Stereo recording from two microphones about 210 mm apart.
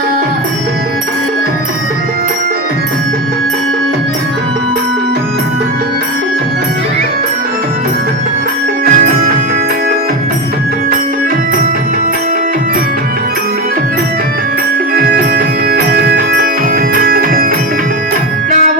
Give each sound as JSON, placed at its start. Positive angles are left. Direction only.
{"t": 8.8, "sound": "music", "side_deg": -45}
{"t": 14.9, "sound": "music", "side_deg": -45}